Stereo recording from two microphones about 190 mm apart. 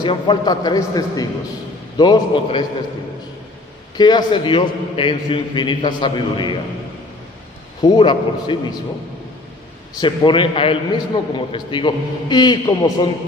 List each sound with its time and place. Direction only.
0.0 s a man's voice: 25° left (ahead or behind)
3.9 s a man's voice: 20° left (ahead or behind)
7.8 s a man's voice: 25° left (ahead or behind)
9.9 s a man's voice: 25° left (ahead or behind)